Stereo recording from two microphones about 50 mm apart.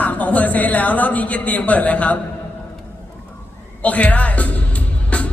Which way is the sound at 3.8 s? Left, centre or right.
Left.